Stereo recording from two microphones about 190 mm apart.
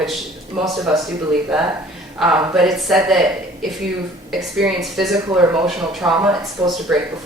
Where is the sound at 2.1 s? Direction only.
5° right (ahead or behind).